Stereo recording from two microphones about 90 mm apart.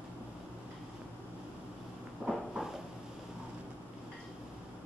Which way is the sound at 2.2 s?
20° right (ahead or behind).